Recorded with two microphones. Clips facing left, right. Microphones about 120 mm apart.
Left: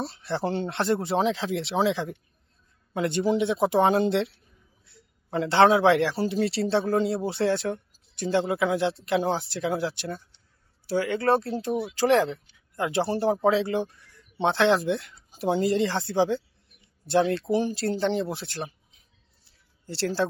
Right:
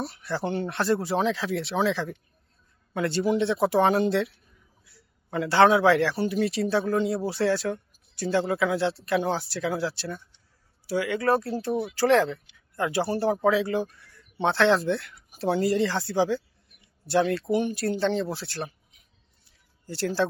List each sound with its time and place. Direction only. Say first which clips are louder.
0.0 s speech: left 1 dB; 25° left (ahead or behind)
7.2 s speech: even; 20° left (ahead or behind)
10.1 s a sound: left 1 dB; 30° left (ahead or behind)
10.8 s speech: left 1 dB; 30° left (ahead or behind)
11.5 s speech: even; 15° left (ahead or behind)
19.9 s speech: even; 30° left (ahead or behind)